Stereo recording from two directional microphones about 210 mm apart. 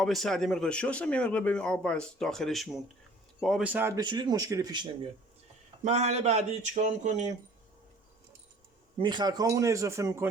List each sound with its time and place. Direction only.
0.0 s speech: centre (ahead or behind); by 4.9 s 20° right (ahead or behind)
5.8 s speech: 30° right (ahead or behind)
9.0 s speech: 20° right (ahead or behind)